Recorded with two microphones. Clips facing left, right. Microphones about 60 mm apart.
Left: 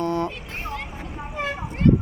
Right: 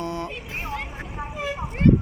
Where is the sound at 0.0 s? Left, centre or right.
Centre.